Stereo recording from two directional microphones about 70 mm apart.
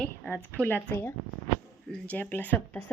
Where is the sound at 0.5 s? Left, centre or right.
Left.